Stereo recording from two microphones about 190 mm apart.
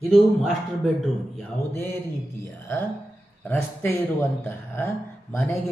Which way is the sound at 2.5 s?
10° left (ahead or behind).